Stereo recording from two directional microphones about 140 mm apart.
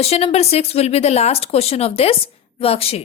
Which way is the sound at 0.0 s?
45° left (ahead or behind).